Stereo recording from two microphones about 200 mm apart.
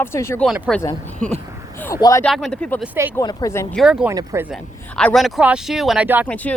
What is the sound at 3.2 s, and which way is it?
Speech, 15° left (ahead or behind).